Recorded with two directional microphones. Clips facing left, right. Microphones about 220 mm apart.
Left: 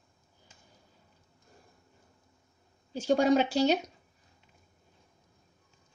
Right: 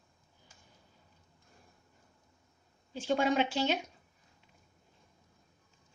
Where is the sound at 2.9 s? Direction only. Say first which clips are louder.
Left 5 dB; 40° left (ahead or behind).